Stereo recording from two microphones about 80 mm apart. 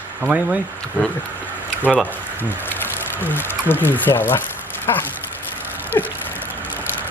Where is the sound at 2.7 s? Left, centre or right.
Left.